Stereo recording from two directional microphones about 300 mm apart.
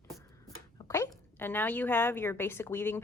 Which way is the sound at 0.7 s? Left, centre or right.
Centre.